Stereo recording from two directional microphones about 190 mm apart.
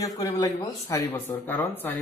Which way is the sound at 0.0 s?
20° left (ahead or behind).